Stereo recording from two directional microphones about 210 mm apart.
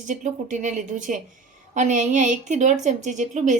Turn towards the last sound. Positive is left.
turn(degrees=-35)  # may be behind; listen again after turning